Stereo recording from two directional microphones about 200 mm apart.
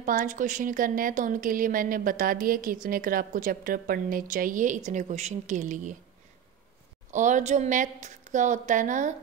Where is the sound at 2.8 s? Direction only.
45° right (ahead or behind).